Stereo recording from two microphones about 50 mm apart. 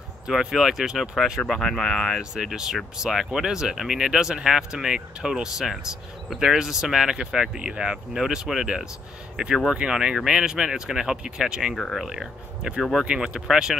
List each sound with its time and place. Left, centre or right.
0.3 s speech: centre
1.5 s speech: centre